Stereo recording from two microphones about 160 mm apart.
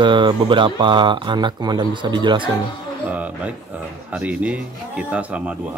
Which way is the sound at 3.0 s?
10° right (ahead or behind).